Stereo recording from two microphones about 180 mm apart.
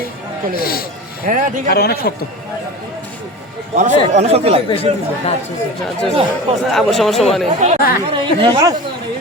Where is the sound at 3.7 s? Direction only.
40° right (ahead or behind).